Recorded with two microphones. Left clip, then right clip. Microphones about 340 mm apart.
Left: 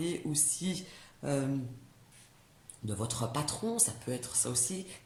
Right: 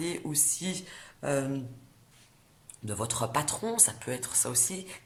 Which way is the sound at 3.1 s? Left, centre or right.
Right.